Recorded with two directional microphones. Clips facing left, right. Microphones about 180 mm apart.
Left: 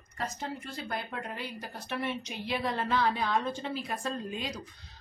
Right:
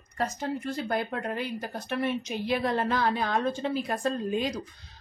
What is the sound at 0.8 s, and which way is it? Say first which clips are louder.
Speech: right 5 dB; 45° right (ahead or behind).